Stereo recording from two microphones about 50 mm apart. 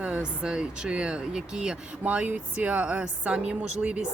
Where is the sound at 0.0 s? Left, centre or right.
Right.